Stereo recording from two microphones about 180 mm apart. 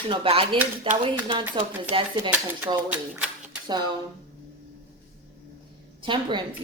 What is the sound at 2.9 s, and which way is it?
Typewriter, 5° right (ahead or behind).